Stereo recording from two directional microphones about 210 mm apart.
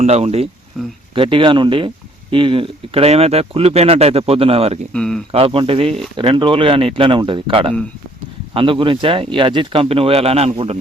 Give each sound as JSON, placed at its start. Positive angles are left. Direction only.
{"t": 0.0, "sound": "speech", "side_deg": -30}
{"t": 0.7, "sound": "speech", "side_deg": 0}
{"t": 1.1, "sound": "speech", "side_deg": -25}
{"t": 4.9, "sound": "speech", "side_deg": 5}
{"t": 5.3, "sound": "speech", "side_deg": -25}